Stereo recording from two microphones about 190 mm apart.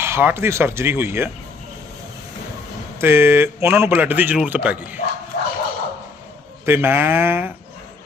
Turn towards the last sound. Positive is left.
turn(degrees=-10)  # may be behind; listen again after turning